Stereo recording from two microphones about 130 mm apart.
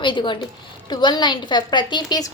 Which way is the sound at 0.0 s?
35° left (ahead or behind).